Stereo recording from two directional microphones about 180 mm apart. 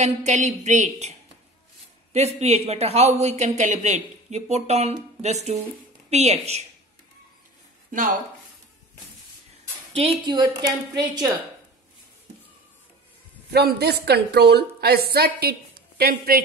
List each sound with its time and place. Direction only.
0.0 s a woman's voice: 40° right (ahead or behind)
2.1 s a woman's voice: 35° right (ahead or behind)
7.9 s speech: 45° right (ahead or behind)
9.9 s a woman's voice: 30° right (ahead or behind)
13.5 s a woman's voice: 65° right (ahead or behind)